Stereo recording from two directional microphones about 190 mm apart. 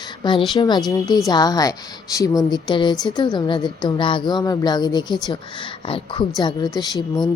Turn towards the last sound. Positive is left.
turn(degrees=20)  # may be behind; listen again after turning